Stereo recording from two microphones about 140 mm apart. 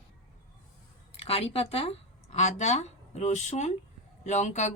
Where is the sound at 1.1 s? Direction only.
45° left (ahead or behind).